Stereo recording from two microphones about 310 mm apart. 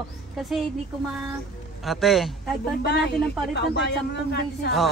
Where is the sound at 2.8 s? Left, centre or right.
Left.